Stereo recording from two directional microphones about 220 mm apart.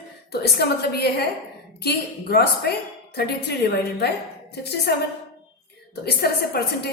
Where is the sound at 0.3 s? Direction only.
45° left (ahead or behind).